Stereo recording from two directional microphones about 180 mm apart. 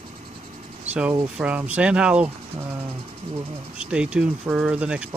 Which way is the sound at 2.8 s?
35° right (ahead or behind).